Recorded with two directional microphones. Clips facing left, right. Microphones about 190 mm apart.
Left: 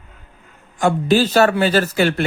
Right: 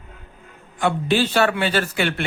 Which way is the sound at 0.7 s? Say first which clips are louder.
Left 4 dB; 45° left (ahead or behind).